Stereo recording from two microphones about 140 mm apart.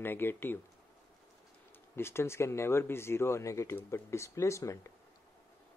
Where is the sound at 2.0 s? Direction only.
20° left (ahead or behind).